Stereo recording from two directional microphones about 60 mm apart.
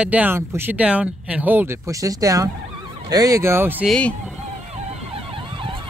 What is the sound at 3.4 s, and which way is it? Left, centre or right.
Speech, right.